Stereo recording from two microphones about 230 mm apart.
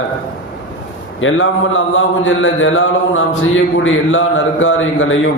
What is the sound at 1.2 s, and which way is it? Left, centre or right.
A man's voice, left.